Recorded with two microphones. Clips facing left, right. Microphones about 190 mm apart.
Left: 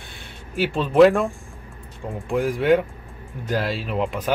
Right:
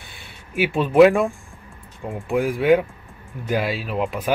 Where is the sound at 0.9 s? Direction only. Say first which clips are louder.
Right 1 dB; centre (ahead or behind).